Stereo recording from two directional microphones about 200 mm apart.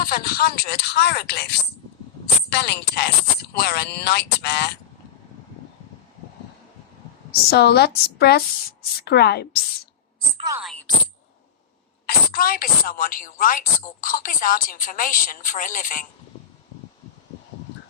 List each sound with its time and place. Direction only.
0.0 s a woman's voice: 50° left (ahead or behind)
7.3 s a woman's voice: 55° left (ahead or behind)
10.3 s speech: 20° right (ahead or behind)
10.6 s speech: centre (ahead or behind)
12.0 s a woman's voice: 45° left (ahead or behind)